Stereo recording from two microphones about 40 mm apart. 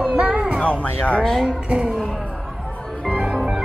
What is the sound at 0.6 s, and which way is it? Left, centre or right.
Music, left.